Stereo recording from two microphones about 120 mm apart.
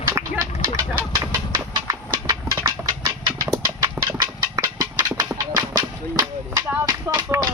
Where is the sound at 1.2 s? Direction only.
30° right (ahead or behind).